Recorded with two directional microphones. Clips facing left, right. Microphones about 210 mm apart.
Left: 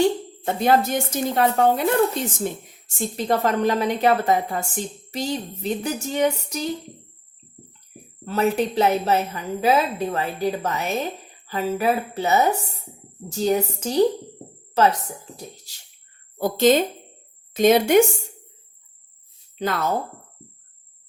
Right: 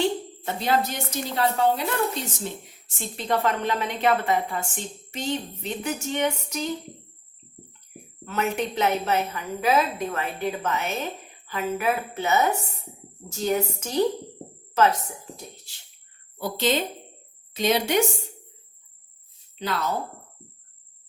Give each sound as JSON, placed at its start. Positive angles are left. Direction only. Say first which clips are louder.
{"t": 0.0, "sound": "a woman's voice", "louder": "left 5 dB", "side_deg": 50}
{"t": 8.2, "sound": "a woman's voice", "louder": "left 5 dB", "side_deg": 35}
{"t": 16.4, "sound": "speech", "louder": "left 7 dB", "side_deg": 45}
{"t": 19.5, "sound": "a woman's voice", "louder": "left 4 dB", "side_deg": 50}